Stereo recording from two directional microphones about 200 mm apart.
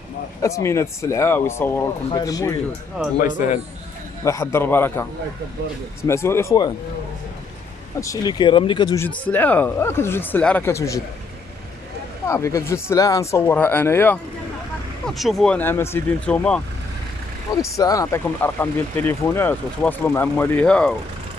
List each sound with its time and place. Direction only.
0.4 s speech: 15° left (ahead or behind)
3.2 s a man's voice: 40° left (ahead or behind)
4.2 s speech: 15° left (ahead or behind)
6.0 s speech: 15° left (ahead or behind)
8.0 s speech: 20° left (ahead or behind)
12.3 s speech: 15° left (ahead or behind)